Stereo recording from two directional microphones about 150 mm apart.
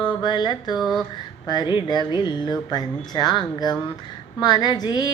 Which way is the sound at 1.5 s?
30° left (ahead or behind).